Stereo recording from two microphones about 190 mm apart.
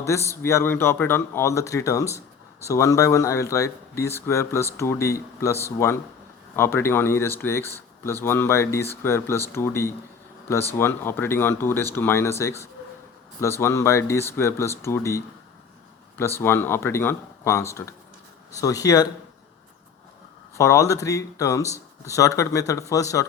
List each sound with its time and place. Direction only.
0.0 s speech: 15° left (ahead or behind)
16.4 s speech: 10° left (ahead or behind)
20.6 s speech: 15° left (ahead or behind)